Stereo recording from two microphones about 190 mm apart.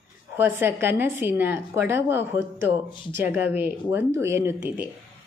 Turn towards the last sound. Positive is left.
turn(degrees=-15)  # may be behind; listen again after turning